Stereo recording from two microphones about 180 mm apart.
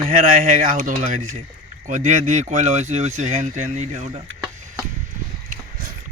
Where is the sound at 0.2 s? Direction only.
50° right (ahead or behind).